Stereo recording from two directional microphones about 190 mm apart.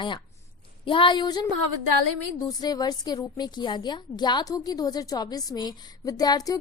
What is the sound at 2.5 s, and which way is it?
A woman's voice, 20° left (ahead or behind).